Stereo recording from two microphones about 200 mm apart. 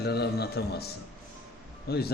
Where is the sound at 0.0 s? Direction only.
55° left (ahead or behind).